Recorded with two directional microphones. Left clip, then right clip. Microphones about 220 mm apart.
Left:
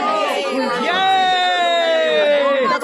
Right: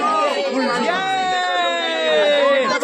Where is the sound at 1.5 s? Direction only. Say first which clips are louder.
Left 4 dB; 55° left (ahead or behind).